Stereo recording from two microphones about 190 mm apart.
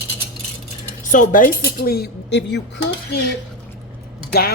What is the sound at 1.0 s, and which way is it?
Speech, 45° left (ahead or behind).